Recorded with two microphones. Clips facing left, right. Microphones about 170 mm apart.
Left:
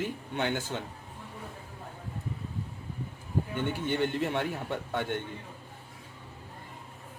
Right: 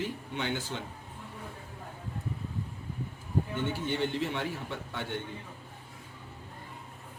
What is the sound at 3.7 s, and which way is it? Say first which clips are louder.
A man's voice: left 3 dB; 55° left (ahead or behind).